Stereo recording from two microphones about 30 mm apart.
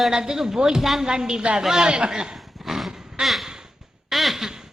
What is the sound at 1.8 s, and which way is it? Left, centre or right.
Speech, right.